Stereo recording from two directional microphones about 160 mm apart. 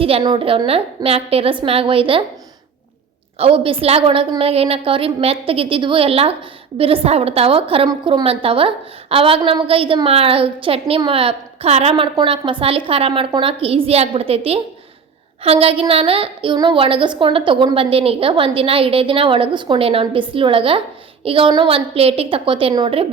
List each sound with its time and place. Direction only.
0.0 s a woman's voice: 30° right (ahead or behind)
3.3 s a woman's voice: 35° right (ahead or behind)